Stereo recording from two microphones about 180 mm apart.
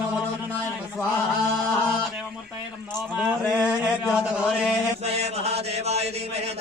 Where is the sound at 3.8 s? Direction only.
5° right (ahead or behind).